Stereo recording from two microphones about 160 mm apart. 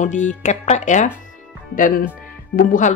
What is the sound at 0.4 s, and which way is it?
Speech, 45° left (ahead or behind).